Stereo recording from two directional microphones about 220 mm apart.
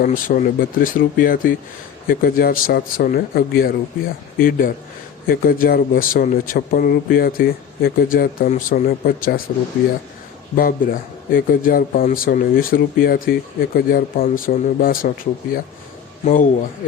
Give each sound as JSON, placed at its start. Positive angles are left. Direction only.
{"t": 0.0, "sound": "speech", "side_deg": 40}
{"t": 10.5, "sound": "speech", "side_deg": 40}